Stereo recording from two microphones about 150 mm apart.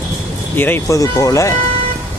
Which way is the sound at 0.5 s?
15° left (ahead or behind).